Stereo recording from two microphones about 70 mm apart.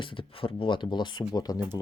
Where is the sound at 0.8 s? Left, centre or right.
Left.